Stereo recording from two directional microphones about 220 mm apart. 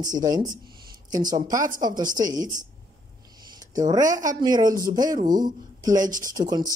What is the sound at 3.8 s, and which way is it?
Speech, 15° right (ahead or behind).